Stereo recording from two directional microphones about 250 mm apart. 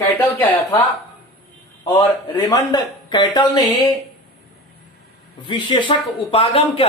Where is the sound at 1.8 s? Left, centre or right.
Centre.